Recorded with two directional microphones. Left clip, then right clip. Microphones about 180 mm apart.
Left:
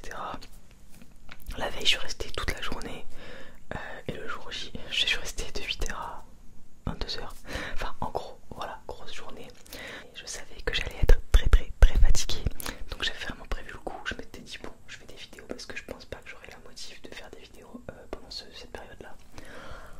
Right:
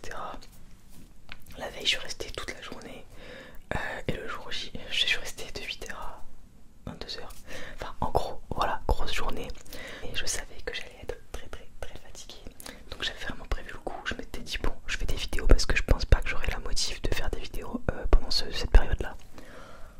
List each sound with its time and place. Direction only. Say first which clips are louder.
0.0 s whispering: left 1 dB; centre (ahead or behind)
1.5 s speech: left 2 dB; 20° left (ahead or behind)
2.4 s whispering: left 5 dB; 30° left (ahead or behind)
3.2 s whispering: even; 10° left (ahead or behind)
3.6 s whispering: right 5 dB; 15° right (ahead or behind)
4.3 s whispering: right 1 dB; centre (ahead or behind); by 7.8 s 30° left (ahead or behind)
8.1 s whispering: right 6 dB; 30° right (ahead or behind); by 9.4 s 50° right (ahead or behind)
9.7 s whispering: left 1 dB; 5° right (ahead or behind)
10.7 s whispering: left 8 dB; 45° left (ahead or behind); by 12.4 s 65° left (ahead or behind)
12.9 s whispering: left 1 dB; centre (ahead or behind)
14.4 s whispering: right 7 dB; 30° right (ahead or behind)
14.9 s whispering: right 10 dB; 55° right (ahead or behind)
19.3 s whispering: left 2 dB; 5° left (ahead or behind)